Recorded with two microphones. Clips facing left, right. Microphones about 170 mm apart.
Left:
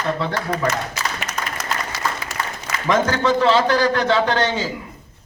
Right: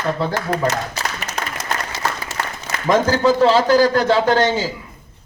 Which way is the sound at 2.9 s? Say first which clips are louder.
Right 3 dB; 35° right (ahead or behind).